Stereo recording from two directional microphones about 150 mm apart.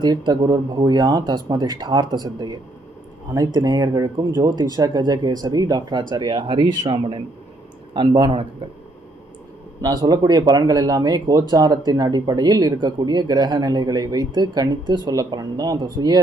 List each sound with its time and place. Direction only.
0.0 s speech: 25° right (ahead or behind)
9.8 s speech: 25° right (ahead or behind)